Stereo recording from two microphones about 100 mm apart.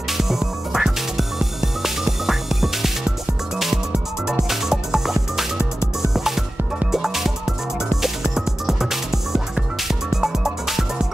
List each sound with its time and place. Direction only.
0.2 s music: 5° right (ahead or behind)